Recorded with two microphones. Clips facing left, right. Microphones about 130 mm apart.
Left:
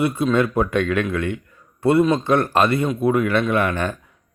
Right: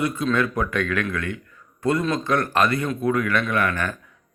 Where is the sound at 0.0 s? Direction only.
20° left (ahead or behind).